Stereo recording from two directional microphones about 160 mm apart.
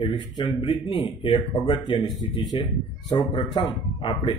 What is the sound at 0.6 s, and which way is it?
Speech, 35° left (ahead or behind).